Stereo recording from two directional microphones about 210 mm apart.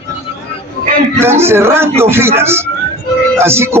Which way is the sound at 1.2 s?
10° right (ahead or behind).